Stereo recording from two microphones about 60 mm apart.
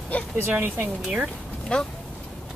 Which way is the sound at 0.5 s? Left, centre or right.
Right.